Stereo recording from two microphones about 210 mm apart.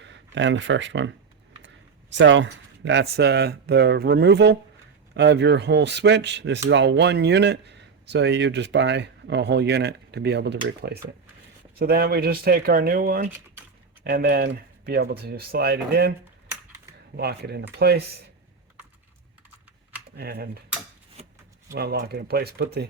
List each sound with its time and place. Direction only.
0.0 s speech: 60° right (ahead or behind)
17.2 s speech: 50° right (ahead or behind)
20.1 s speech: 45° right (ahead or behind)
21.2 s shuffling cards: 30° right (ahead or behind)
21.7 s speech: 45° right (ahead or behind)